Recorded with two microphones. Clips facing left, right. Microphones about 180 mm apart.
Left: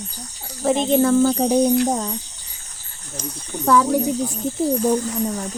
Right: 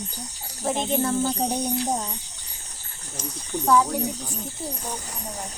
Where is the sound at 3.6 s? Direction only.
85° left.